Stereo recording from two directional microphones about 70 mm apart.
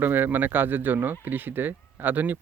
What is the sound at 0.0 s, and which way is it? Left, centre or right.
Speech, right.